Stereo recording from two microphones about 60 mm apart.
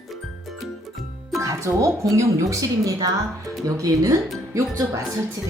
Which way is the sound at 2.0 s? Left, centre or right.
Right.